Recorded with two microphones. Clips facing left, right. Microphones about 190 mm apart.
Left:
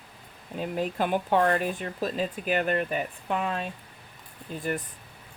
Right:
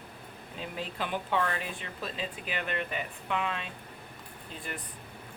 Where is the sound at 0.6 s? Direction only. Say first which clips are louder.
Left 8 dB; 50° left (ahead or behind).